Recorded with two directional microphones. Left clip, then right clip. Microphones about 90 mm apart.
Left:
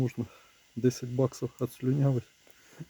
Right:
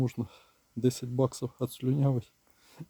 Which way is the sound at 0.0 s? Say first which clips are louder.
Even; 30° right (ahead or behind).